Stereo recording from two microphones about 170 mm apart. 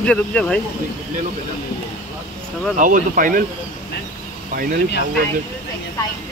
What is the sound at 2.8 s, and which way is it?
Speech, 50° right (ahead or behind).